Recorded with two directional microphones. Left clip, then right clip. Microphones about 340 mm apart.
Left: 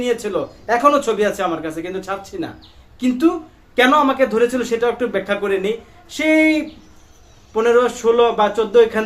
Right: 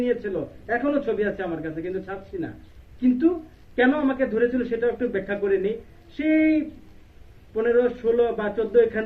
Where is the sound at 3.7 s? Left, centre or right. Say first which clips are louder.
Left 8 dB; left.